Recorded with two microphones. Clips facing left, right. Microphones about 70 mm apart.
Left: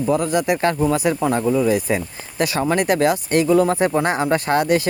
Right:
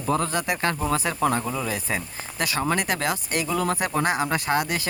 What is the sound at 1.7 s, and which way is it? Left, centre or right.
Speech, centre.